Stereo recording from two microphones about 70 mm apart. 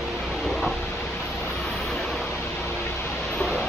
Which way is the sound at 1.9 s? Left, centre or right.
Centre.